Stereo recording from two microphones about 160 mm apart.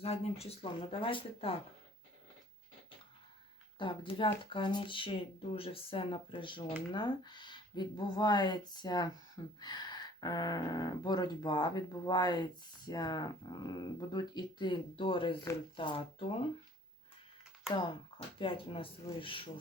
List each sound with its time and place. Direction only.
0.0 s speech: 40° left (ahead or behind)
3.8 s speech: 30° left (ahead or behind)
18.3 s speech: 35° left (ahead or behind)